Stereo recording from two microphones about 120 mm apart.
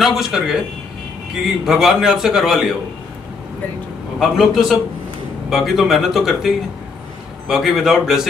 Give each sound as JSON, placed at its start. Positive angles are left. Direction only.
{"t": 0.0, "sound": "a man's voice", "side_deg": -5}
{"t": 4.2, "sound": "a man's voice", "side_deg": 0}